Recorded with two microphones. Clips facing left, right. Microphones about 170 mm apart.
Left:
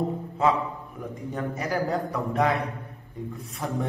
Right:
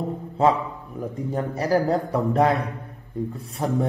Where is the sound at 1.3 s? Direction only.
35° right (ahead or behind).